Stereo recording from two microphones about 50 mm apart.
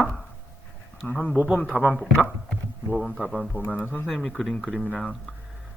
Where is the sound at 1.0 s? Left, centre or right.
Left.